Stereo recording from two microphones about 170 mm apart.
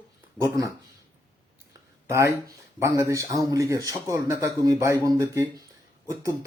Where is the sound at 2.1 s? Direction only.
15° right (ahead or behind).